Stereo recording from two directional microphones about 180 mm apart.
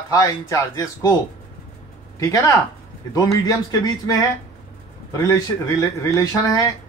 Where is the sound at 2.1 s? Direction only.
15° left (ahead or behind).